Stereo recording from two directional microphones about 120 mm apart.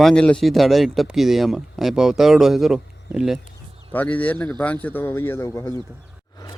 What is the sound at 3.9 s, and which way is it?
Speech, 10° left (ahead or behind).